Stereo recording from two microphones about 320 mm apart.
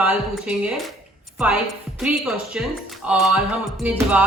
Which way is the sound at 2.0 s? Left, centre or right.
Centre.